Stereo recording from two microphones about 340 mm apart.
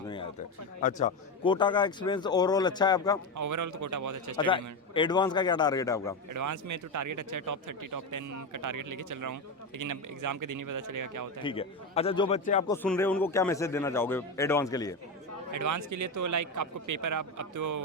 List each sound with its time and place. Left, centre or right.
0.8 s a man's voice: left
3.3 s speech: right
4.4 s a man's voice: centre
6.3 s speech: right
11.4 s a man's voice: centre
12.7 s a man's voice: centre
15.5 s speech: right